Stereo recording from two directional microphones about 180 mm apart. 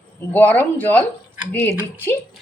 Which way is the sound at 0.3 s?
10° left (ahead or behind).